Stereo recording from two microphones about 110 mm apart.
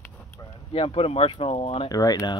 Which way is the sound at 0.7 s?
55° left (ahead or behind).